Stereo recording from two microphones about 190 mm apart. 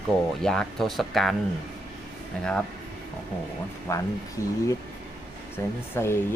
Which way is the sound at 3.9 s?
15° left (ahead or behind).